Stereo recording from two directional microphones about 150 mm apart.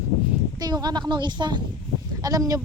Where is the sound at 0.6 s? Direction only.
25° right (ahead or behind).